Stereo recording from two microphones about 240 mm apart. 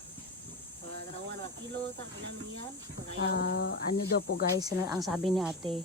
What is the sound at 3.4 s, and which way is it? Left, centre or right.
Speech, left.